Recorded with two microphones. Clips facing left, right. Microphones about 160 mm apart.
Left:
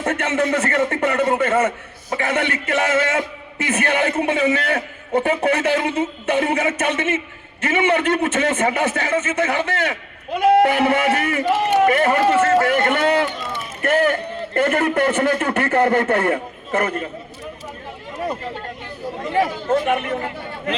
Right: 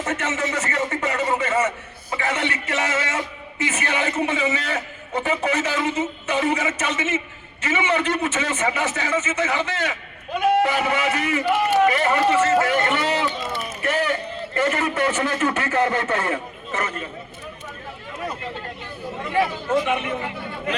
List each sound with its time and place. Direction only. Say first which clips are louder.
0.0 s a man's voice: left 5 dB; 55° left (ahead or behind)
19.3 s speech: left 2 dB; 30° left (ahead or behind)
19.7 s speech: left 3 dB; 50° left (ahead or behind)